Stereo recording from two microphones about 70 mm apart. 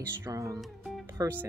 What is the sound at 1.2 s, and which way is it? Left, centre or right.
Speech, right.